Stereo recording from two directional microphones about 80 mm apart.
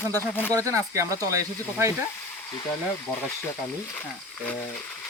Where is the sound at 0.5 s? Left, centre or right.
Right.